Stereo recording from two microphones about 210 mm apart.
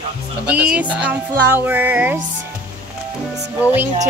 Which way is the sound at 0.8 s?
5° right (ahead or behind).